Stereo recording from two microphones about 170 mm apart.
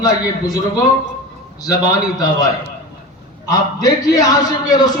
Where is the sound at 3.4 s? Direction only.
20° left (ahead or behind).